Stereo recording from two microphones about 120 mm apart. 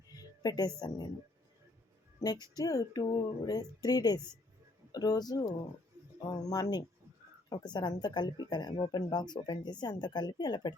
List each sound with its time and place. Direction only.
0.1 s music: 35° left (ahead or behind)
0.8 s speech: 30° left (ahead or behind)
2.2 s speech: 30° left (ahead or behind)